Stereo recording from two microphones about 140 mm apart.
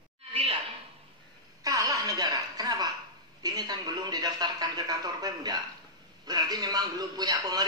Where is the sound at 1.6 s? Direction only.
25° right (ahead or behind).